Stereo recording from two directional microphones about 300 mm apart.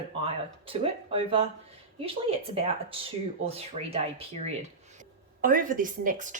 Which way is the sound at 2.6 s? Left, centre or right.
Centre.